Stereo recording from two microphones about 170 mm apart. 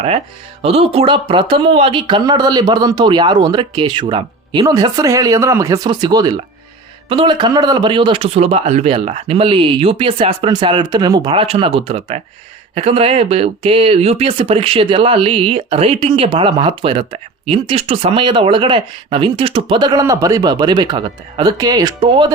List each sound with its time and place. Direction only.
0.6 s speech: 35° right (ahead or behind)